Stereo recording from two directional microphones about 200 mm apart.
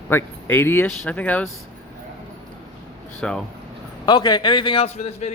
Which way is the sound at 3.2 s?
5° left (ahead or behind).